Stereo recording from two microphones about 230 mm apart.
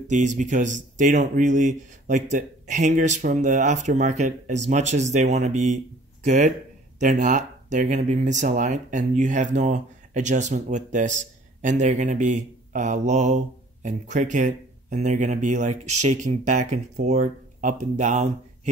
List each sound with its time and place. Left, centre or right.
0.1 s speech: right